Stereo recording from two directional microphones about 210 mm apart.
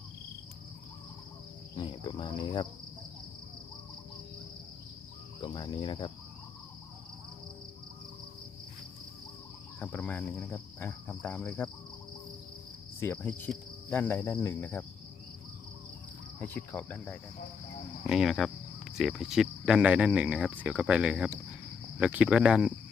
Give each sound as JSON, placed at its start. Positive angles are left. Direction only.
{"t": 1.7, "sound": "cricket", "side_deg": 20}
{"t": 5.4, "sound": "cricket", "side_deg": 20}
{"t": 9.8, "sound": "cricket", "side_deg": 10}
{"t": 13.0, "sound": "cricket", "side_deg": 10}
{"t": 16.4, "sound": "cricket", "side_deg": 10}